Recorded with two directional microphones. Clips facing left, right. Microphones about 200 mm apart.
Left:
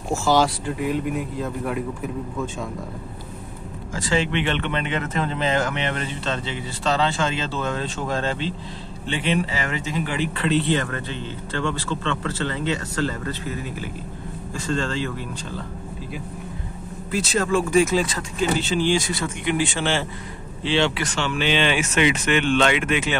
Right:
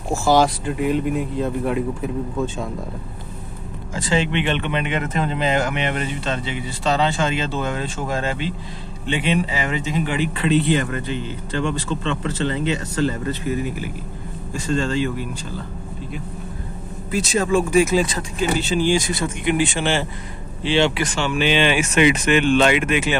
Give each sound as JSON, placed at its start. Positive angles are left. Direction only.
{"t": 0.1, "sound": "speech", "side_deg": -15}
{"t": 3.9, "sound": "speech", "side_deg": -20}
{"t": 17.1, "sound": "speech", "side_deg": -15}